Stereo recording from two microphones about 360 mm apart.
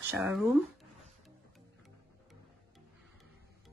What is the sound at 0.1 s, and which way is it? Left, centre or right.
Speech, centre.